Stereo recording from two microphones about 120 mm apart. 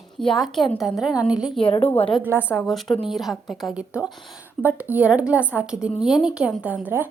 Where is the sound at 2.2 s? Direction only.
15° right (ahead or behind).